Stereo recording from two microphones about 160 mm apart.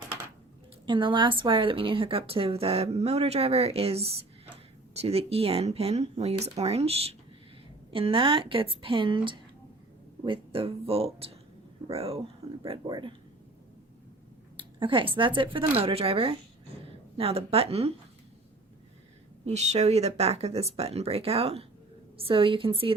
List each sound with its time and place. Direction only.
0.9 s a woman's voice: 30° right (ahead or behind)
14.5 s a sound: 30° right (ahead or behind)
15.4 s a woman's voice: 35° right (ahead or behind)
19.5 s a woman's voice: 45° right (ahead or behind)